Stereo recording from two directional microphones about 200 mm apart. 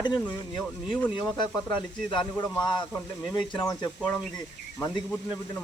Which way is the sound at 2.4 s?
20° left (ahead or behind).